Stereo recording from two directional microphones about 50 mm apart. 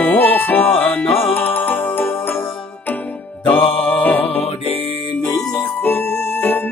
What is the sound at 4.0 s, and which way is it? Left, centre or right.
Mantra, left.